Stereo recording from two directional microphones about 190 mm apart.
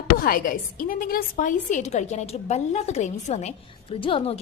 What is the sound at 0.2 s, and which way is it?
A woman's voice, 50° left (ahead or behind).